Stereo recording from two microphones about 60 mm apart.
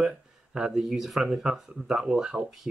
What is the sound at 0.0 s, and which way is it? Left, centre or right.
Speech, centre.